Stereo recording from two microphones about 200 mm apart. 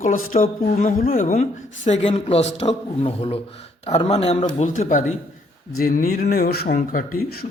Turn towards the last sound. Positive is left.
turn(degrees=45)  # may be behind; listen again after turning